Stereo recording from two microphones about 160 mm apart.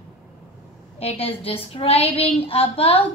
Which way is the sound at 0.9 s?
35° left (ahead or behind).